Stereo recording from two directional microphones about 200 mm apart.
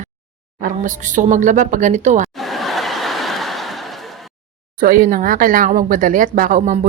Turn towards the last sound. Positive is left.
turn(degrees=-40)  # may be behind; listen again after turning